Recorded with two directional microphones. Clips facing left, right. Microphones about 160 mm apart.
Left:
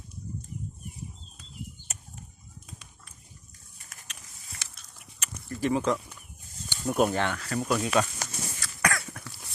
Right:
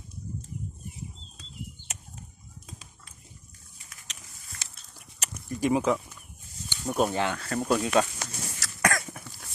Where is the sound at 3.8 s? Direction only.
50° left (ahead or behind).